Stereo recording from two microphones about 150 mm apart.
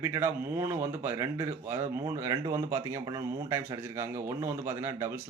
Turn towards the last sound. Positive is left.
turn(degrees=-20)  # may be behind; listen again after turning